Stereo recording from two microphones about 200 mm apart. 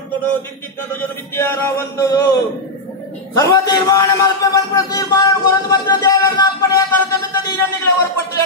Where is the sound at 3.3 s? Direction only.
15° left (ahead or behind).